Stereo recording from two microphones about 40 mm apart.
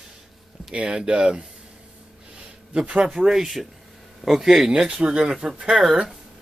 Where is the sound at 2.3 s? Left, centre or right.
Right.